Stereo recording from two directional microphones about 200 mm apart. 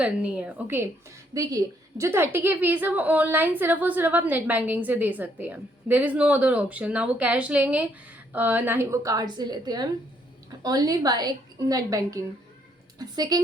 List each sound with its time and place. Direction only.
0.0 s a woman's voice: 5° right (ahead or behind)